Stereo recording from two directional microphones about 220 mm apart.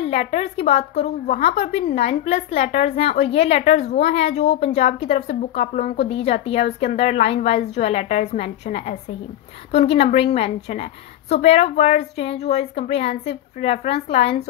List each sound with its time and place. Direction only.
0.0 s a woman's voice: 30° left (ahead or behind)